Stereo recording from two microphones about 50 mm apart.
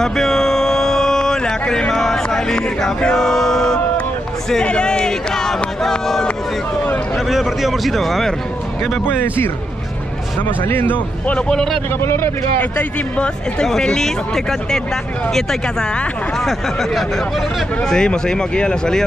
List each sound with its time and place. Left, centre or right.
0.0 s a sound: centre
2.2 s speech: centre
4.6 s a man's voice: centre
9.0 s speech: left
10.6 s a man's voice: left
11.5 s speech: centre
12.0 s speech: left
13.7 s speech: centre
16.3 s a man's voice: centre
17.8 s speech: centre